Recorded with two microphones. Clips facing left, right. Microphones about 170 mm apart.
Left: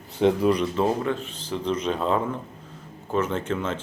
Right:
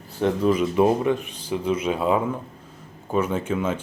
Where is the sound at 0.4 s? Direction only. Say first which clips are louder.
Right 1 dB; 5° right (ahead or behind).